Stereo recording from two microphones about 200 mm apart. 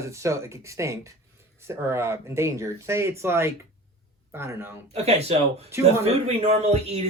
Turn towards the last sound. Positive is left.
turn(degrees=-30)  # may be behind; listen again after turning